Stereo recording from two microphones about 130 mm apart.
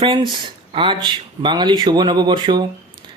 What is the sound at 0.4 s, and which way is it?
Speech, 40° right (ahead or behind).